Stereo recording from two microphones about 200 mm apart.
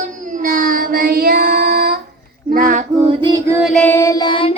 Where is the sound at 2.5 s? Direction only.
40° right (ahead or behind); by 3.6 s 15° right (ahead or behind).